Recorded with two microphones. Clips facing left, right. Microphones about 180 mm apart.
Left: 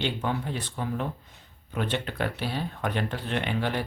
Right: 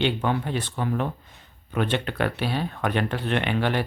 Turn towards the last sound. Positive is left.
turn(degrees=-70)  # may be behind; listen again after turning